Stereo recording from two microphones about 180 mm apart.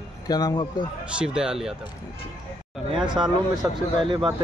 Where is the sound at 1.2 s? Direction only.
5° right (ahead or behind).